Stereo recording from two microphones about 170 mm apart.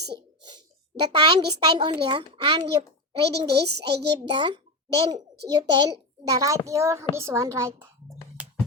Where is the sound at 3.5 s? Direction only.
75° right (ahead or behind).